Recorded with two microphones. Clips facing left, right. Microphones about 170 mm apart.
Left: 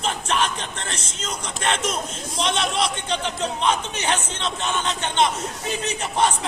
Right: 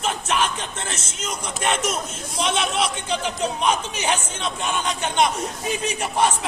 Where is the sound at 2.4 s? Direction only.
5° right (ahead or behind).